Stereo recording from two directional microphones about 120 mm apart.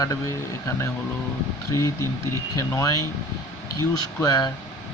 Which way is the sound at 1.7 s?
25° left (ahead or behind).